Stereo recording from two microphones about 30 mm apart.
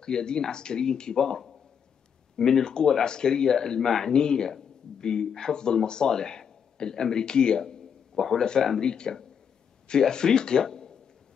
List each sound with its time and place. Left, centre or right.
0.0 s speech: left
2.4 s speech: left
4.1 s speech: left
8.8 s speech: left
10.6 s a sound: centre